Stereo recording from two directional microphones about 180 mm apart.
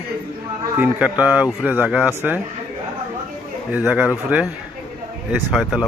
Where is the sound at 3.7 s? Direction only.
5° right (ahead or behind).